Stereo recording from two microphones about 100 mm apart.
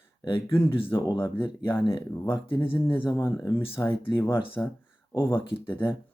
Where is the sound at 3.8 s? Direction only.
35° left (ahead or behind).